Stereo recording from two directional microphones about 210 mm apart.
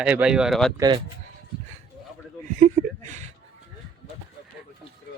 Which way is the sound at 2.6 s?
35° right (ahead or behind).